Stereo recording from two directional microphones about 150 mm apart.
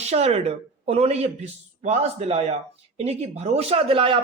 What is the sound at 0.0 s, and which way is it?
A man's voice, 45° right (ahead or behind).